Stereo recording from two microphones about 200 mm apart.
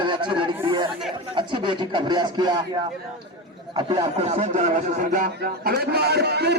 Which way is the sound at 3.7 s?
25° right (ahead or behind).